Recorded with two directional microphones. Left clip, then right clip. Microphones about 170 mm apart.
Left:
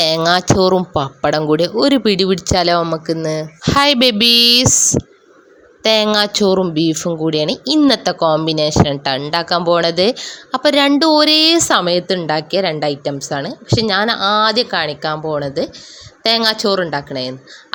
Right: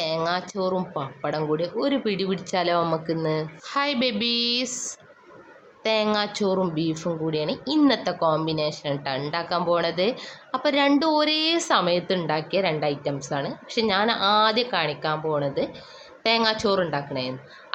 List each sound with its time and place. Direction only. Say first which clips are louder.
0.0 s speech: left 12 dB; 60° left (ahead or behind); by 3.2 s 35° left (ahead or behind)
3.6 s speech: left 15 dB; 60° left (ahead or behind)